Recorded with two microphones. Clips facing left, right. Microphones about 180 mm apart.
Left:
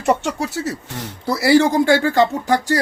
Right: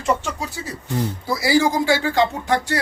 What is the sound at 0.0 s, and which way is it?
Speech, 70° left (ahead or behind).